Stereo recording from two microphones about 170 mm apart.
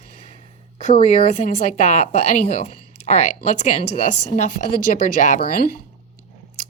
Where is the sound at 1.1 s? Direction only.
45° left (ahead or behind).